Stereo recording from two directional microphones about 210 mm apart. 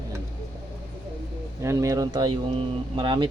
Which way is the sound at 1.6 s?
15° right (ahead or behind).